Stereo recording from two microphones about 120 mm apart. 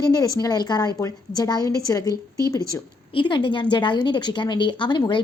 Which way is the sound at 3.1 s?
40° left (ahead or behind).